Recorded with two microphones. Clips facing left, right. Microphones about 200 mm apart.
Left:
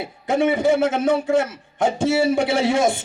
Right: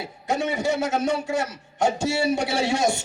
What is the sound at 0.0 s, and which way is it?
A man's voice, 55° left (ahead or behind).